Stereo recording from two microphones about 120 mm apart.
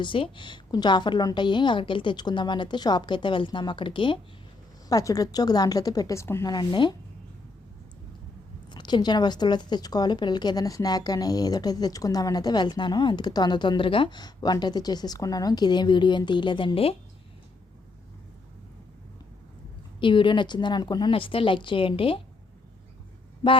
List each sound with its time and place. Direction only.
0.0 s a woman's voice: 45° left (ahead or behind)
4.9 s a woman's voice: 30° left (ahead or behind)
6.5 s a woman's voice: 40° left (ahead or behind)
8.7 s a woman's voice: 40° left (ahead or behind)
20.0 s a woman's voice: 45° left (ahead or behind)